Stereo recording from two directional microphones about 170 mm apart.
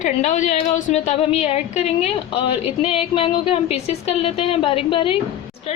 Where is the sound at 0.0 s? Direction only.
45° left (ahead or behind).